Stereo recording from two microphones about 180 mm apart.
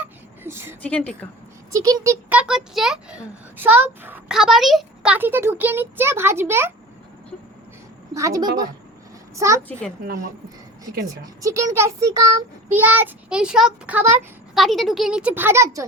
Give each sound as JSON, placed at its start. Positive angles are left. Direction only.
{"t": 0.0, "sound": "a sound", "side_deg": -15}
{"t": 0.8, "sound": "a woman's voice", "side_deg": 5}
{"t": 1.7, "sound": "a child's voice", "side_deg": -20}
{"t": 2.3, "sound": "a child's voice", "side_deg": -5}
{"t": 8.1, "sound": "a woman's voice", "side_deg": -20}
{"t": 11.4, "sound": "a child's voice", "side_deg": -15}
{"t": 14.5, "sound": "a child's voice", "side_deg": 0}